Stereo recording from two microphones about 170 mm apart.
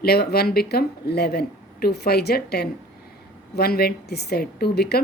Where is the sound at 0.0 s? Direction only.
65° left (ahead or behind).